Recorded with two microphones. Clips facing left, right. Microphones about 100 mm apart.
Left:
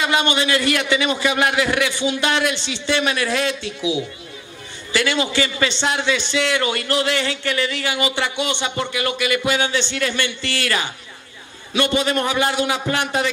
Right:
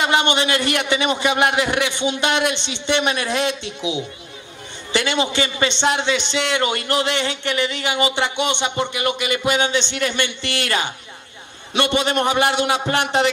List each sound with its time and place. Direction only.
0.0 s a man's voice: 25° right (ahead or behind)